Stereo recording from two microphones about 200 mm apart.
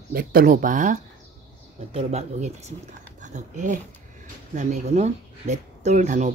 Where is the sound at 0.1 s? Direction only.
45° right (ahead or behind).